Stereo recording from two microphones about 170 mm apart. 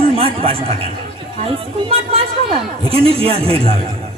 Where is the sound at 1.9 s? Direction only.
35° right (ahead or behind).